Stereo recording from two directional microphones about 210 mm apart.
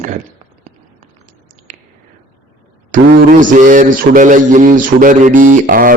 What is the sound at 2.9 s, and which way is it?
A man's voice, 40° right (ahead or behind).